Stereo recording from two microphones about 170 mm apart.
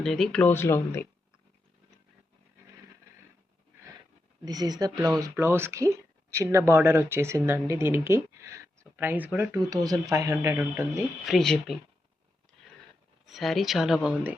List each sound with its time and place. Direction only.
0.0 s speech: 5° left (ahead or behind)
4.4 s speech: 20° right (ahead or behind)
11.3 s speech: centre (ahead or behind)
13.2 s speech: centre (ahead or behind)